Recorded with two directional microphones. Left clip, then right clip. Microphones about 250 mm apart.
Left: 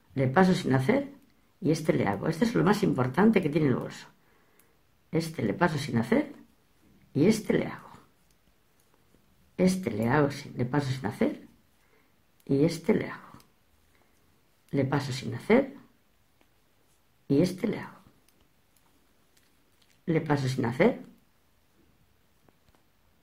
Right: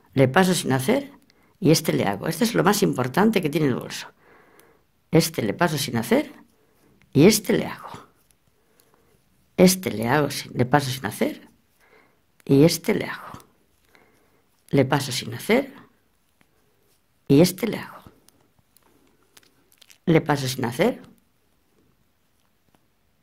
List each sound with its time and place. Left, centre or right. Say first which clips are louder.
0.1 s speech: right 6 dB; right
9.6 s speech: right 9 dB; right
12.4 s speech: right 8 dB; right
14.7 s speech: right 8 dB; right
17.3 s speech: right 8 dB; right
19.3 s a sound: right 10 dB; right